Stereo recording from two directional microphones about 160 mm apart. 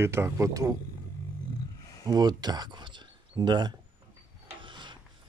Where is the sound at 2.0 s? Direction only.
25° right (ahead or behind).